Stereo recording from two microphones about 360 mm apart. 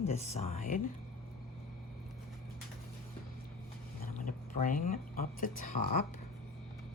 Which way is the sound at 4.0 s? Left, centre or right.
Left.